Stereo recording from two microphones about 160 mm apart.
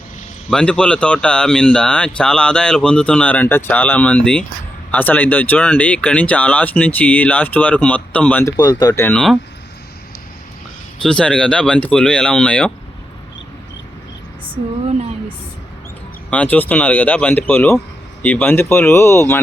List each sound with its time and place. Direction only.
0.5 s speech: 5° left (ahead or behind)
8.5 s speech: 25° left (ahead or behind)
9.0 s speech: 5° left (ahead or behind)
11.0 s speech: 5° left (ahead or behind)
16.3 s speech: 10° left (ahead or behind)